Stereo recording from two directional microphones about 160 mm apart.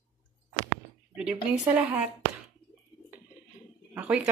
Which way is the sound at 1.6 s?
10° right (ahead or behind).